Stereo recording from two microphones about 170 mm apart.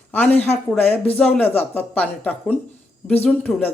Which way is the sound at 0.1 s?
10° left (ahead or behind).